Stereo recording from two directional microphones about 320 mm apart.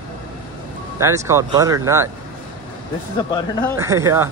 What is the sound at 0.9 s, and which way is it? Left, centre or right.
Speech, centre.